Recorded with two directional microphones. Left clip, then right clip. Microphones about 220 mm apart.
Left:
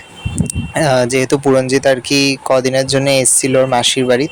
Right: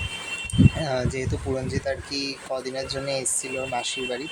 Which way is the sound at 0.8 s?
45° left (ahead or behind).